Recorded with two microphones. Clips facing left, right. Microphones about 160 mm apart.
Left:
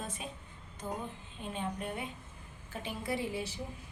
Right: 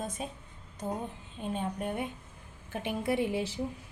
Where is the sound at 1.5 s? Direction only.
45° right (ahead or behind).